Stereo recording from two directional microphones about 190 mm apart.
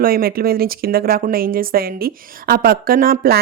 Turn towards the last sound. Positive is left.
turn(degrees=-50)  # may be behind; listen again after turning